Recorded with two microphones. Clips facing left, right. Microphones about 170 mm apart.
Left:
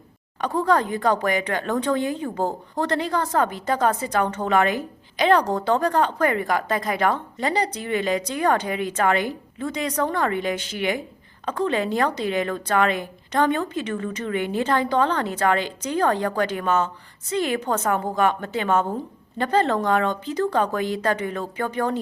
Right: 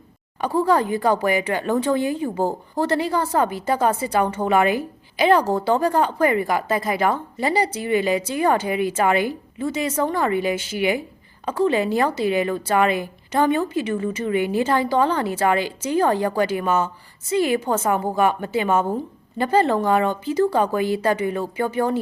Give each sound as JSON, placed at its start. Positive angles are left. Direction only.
{"t": 0.4, "sound": "speech", "side_deg": -10}